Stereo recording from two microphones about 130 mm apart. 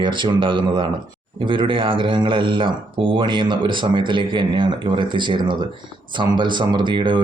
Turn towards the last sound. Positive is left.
turn(degrees=-40)  # may be behind; listen again after turning